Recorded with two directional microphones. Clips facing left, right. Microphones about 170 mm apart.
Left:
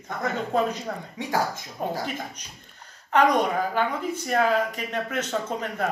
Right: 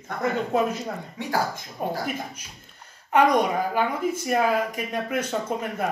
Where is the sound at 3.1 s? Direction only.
10° right (ahead or behind).